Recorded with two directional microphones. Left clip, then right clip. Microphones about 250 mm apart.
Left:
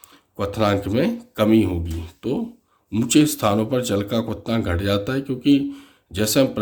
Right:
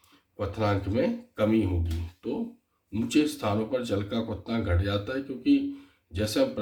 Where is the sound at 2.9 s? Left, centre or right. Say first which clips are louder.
Left 8 dB; left.